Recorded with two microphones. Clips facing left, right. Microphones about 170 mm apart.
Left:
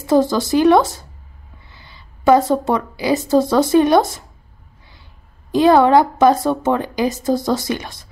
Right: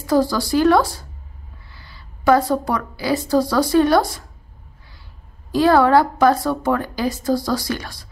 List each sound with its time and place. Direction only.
0.0 s a woman's voice: 20° left (ahead or behind)
5.5 s a woman's voice: 20° left (ahead or behind)